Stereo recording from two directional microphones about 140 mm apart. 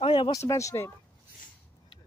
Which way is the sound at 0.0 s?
35° left (ahead or behind).